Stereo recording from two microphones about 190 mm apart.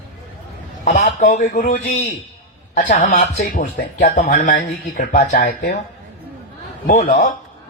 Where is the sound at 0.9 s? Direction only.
40° left (ahead or behind).